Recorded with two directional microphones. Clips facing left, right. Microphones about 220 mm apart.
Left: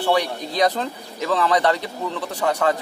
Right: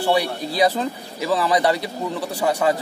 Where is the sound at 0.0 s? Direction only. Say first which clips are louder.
Right 1 dB; 10° right (ahead or behind).